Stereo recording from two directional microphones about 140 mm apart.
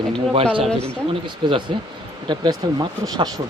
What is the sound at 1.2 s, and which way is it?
Speech, 35° right (ahead or behind).